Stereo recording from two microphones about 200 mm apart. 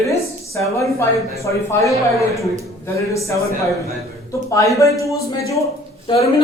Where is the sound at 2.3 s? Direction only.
15° left (ahead or behind).